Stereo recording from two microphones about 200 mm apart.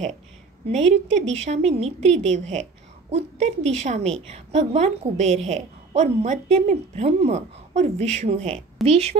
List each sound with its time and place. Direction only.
0.7 s a woman's voice: 35° right (ahead or behind)